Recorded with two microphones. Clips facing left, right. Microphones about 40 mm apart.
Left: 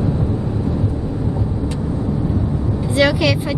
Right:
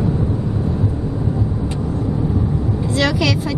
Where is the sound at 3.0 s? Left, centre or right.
Centre.